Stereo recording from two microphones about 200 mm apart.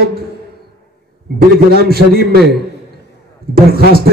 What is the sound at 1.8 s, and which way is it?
Speech, 50° right (ahead or behind).